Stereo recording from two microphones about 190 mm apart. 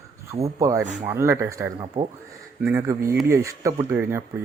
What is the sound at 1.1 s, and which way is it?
Speech, 15° right (ahead or behind).